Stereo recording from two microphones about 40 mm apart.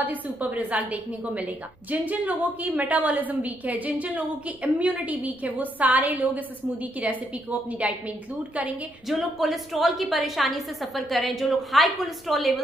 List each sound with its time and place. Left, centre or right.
0.0 s a woman's voice: right
9.4 s a woman's voice: centre